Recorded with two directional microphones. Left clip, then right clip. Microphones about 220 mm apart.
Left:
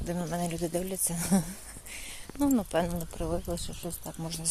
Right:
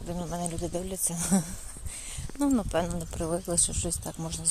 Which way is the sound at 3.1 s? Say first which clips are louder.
Right 2 dB; 10° right (ahead or behind).